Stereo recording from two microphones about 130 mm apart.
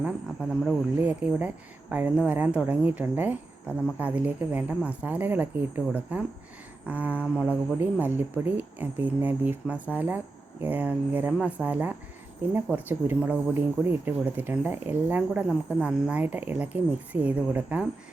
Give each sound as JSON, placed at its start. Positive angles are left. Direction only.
{"t": 0.6, "sound": "speech", "side_deg": -5}